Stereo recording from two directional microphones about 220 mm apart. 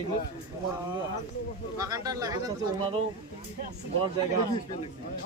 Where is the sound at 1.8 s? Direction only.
15° right (ahead or behind).